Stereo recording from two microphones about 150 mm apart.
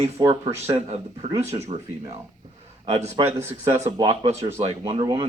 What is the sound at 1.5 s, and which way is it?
Speech, 45° right (ahead or behind).